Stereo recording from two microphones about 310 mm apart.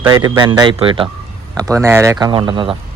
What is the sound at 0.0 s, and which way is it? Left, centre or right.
A man's voice, centre.